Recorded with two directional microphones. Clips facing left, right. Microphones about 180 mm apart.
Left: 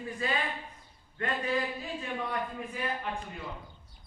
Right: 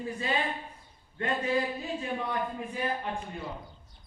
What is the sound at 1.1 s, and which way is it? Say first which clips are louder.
Speech: right 2 dB; 25° right (ahead or behind).